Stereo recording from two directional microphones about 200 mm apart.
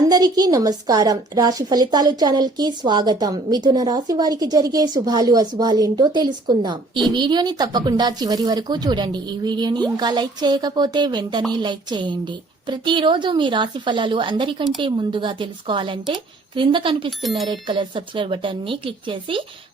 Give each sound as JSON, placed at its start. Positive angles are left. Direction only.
{"t": 0.1, "sound": "a woman's voice", "side_deg": -20}
{"t": 17.1, "sound": "speech", "side_deg": 0}
{"t": 17.5, "sound": "a woman's voice", "side_deg": -25}